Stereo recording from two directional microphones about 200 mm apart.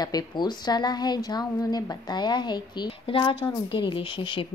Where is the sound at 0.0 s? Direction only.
20° left (ahead or behind).